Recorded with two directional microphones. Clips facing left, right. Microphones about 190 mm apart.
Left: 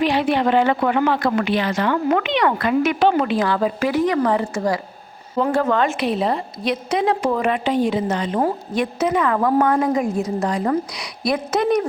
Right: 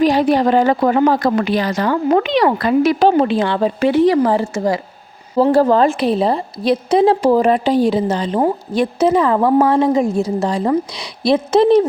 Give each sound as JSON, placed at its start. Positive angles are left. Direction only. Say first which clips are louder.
{"t": 0.0, "sound": "a woman's voice", "louder": "right 5 dB", "side_deg": -40}
{"t": 5.4, "sound": "a woman's voice", "louder": "right 6 dB", "side_deg": -35}